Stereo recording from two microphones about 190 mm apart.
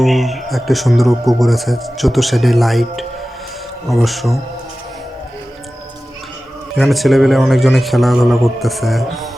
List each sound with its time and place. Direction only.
0.0 s speech: centre (ahead or behind)
6.7 s speech: centre (ahead or behind)